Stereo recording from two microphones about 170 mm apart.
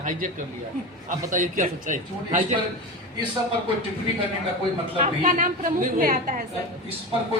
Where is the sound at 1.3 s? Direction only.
50° right (ahead or behind).